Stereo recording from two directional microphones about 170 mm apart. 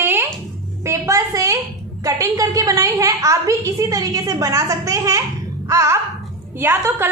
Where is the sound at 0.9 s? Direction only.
15° right (ahead or behind).